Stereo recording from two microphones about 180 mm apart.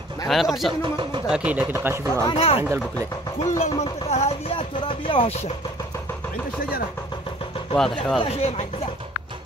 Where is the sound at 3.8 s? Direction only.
35° left (ahead or behind).